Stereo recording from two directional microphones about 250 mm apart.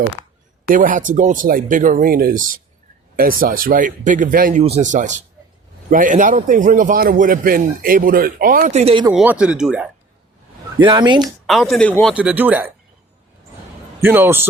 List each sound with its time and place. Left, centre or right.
0.7 s a man's voice: right
9.1 s speech: centre
10.8 s speech: centre
11.4 s speech: centre
12.1 s speech: centre
14.0 s speech: centre